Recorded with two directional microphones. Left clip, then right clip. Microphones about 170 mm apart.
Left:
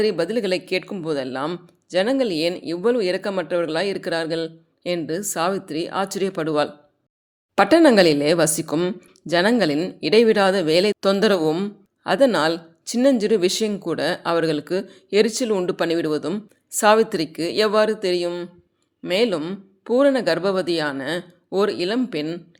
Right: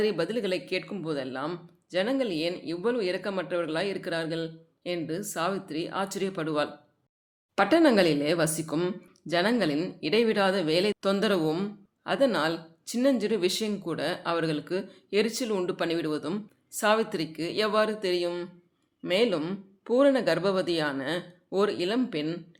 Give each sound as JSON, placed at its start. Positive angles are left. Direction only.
{"t": 0.0, "sound": "speech", "side_deg": 30}